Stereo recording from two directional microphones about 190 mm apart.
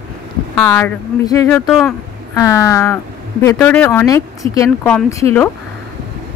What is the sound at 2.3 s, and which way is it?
A woman's voice, 15° left (ahead or behind).